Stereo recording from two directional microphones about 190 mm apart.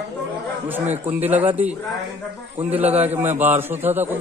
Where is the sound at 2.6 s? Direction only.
10° right (ahead or behind).